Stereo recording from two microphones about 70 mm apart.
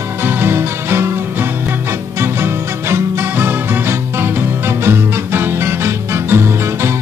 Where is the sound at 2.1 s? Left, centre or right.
Right.